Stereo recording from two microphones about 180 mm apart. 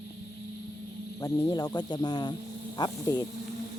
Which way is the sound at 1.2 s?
20° left (ahead or behind).